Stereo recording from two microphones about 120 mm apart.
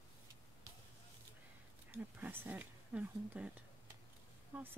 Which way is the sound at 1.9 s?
20° right (ahead or behind).